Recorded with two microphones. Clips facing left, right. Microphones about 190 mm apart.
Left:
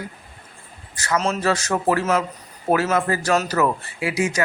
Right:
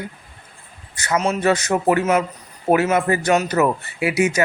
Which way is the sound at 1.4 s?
20° right (ahead or behind).